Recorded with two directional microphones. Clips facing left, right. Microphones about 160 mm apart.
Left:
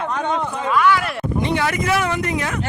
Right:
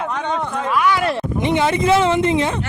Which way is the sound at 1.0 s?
20° right (ahead or behind).